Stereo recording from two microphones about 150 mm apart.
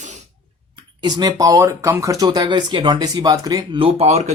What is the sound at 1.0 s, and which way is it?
Speech, 25° right (ahead or behind).